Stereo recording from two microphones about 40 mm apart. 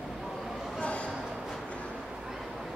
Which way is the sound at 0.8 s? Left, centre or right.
Left.